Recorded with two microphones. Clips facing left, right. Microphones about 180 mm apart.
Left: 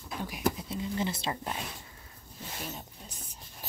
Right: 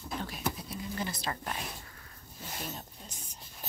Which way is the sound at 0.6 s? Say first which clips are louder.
Left 4 dB; 25° left (ahead or behind).